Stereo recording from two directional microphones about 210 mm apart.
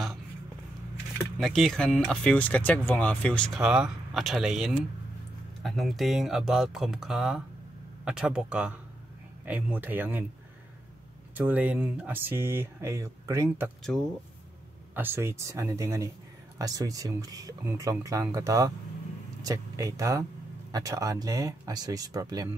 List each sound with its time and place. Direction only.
1.1 s speech: centre (ahead or behind)
11.3 s speech: 5° right (ahead or behind)
13.9 s speech: centre (ahead or behind)
15.0 s speech: 10° right (ahead or behind)